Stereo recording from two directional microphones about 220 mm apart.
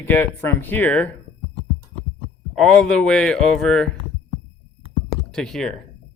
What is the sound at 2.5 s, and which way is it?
A man's voice, 5° left (ahead or behind).